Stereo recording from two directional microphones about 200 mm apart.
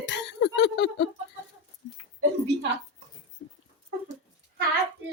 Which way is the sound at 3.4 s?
65° left (ahead or behind).